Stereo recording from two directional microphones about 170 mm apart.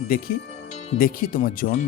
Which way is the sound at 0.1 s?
60° left (ahead or behind).